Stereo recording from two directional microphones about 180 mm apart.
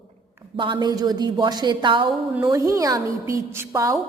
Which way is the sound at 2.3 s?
15° right (ahead or behind).